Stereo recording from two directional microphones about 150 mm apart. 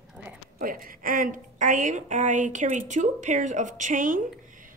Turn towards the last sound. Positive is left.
turn(degrees=-60)  # may be behind; listen again after turning